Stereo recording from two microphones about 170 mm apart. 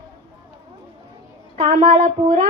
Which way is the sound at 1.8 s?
45° right (ahead or behind).